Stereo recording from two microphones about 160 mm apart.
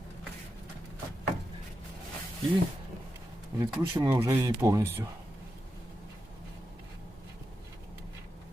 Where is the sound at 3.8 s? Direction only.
15° right (ahead or behind).